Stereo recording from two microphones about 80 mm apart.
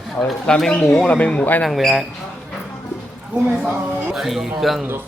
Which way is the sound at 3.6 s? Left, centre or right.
Centre.